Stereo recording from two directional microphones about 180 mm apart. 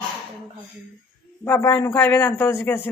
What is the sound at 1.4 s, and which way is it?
A man's voice, 15° left (ahead or behind).